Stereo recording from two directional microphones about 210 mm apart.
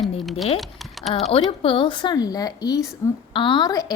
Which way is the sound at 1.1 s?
30° left (ahead or behind).